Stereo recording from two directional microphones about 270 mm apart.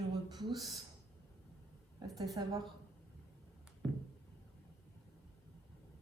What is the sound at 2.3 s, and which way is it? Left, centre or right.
Speech, centre.